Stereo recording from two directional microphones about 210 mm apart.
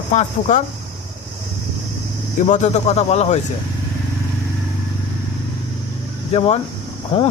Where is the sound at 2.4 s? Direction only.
30° left (ahead or behind).